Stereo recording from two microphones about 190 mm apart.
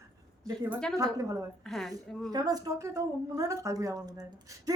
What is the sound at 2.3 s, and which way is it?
Speech, 20° right (ahead or behind).